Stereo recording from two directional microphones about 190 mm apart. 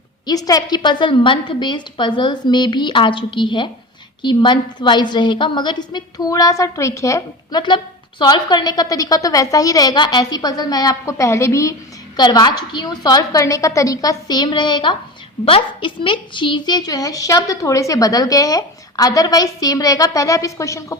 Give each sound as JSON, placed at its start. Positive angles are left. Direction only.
{"t": 0.3, "sound": "a woman's voice", "side_deg": 20}